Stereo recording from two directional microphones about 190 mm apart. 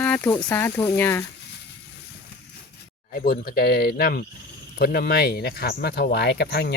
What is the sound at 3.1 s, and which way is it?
Speech, 50° left (ahead or behind).